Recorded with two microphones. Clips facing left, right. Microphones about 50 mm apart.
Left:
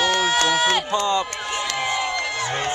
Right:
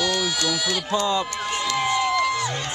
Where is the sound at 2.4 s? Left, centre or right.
Left.